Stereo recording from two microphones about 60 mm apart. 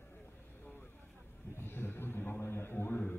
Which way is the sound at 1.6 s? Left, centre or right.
Left.